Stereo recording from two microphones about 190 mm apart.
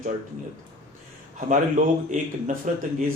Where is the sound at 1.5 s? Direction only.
40° right (ahead or behind).